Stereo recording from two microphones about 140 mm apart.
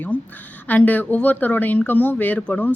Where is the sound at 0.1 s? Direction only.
15° left (ahead or behind).